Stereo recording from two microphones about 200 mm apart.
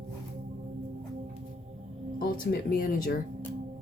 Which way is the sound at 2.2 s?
45° left (ahead or behind).